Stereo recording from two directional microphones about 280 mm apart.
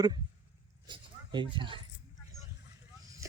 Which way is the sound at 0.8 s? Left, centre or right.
Centre.